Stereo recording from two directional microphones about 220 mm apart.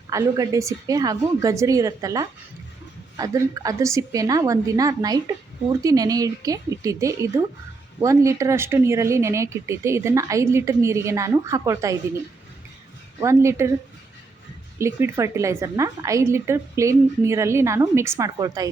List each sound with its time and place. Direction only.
0.1 s speech: 15° right (ahead or behind)
13.1 s speech: 15° right (ahead or behind)
14.8 s speech: 10° right (ahead or behind)